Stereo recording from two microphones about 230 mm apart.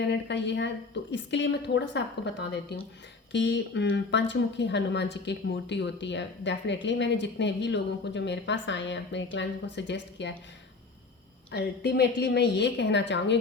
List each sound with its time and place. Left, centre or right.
0.1 s speech: left
11.5 s speech: left